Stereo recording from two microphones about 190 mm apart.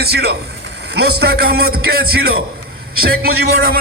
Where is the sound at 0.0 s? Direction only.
55° right (ahead or behind).